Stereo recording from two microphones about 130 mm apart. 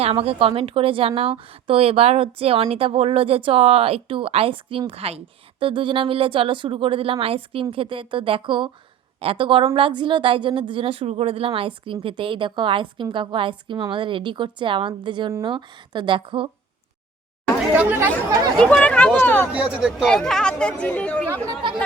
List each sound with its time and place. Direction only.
0.0 s a woman's voice: 50° right (ahead or behind)
17.7 s speech: 15° right (ahead or behind)
18.6 s speech: 10° left (ahead or behind)
19.5 s speech: 10° right (ahead or behind)
20.1 s speech: 5° left (ahead or behind)